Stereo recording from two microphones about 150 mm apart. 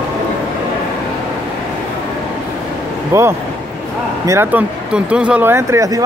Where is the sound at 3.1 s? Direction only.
15° right (ahead or behind).